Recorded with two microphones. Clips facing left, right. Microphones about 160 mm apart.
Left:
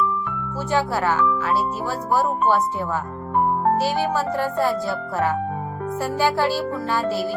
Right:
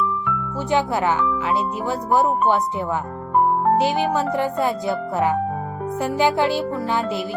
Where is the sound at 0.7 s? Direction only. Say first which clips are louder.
Right 1 dB; 20° right (ahead or behind).